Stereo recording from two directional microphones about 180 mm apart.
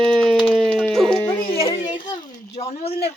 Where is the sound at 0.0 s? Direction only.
Centre (ahead or behind).